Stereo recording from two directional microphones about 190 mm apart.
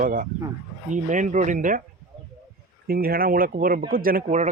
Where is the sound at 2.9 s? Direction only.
50° right (ahead or behind).